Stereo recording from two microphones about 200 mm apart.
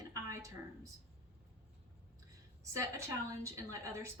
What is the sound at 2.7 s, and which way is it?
A woman's voice, 15° right (ahead or behind).